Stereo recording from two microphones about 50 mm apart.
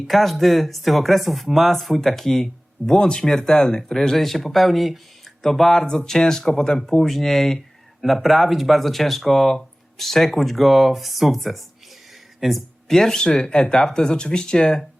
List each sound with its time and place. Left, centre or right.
0.1 s speech: centre